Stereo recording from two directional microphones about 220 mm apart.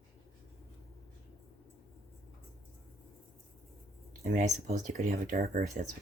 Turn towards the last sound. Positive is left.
turn(degrees=-35)  # may be behind; listen again after turning